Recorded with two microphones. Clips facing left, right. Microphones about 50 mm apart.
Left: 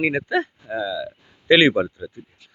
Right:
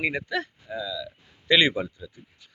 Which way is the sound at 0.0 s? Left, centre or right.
Left.